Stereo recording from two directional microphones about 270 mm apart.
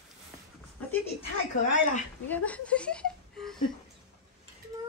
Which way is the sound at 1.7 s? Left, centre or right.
Left.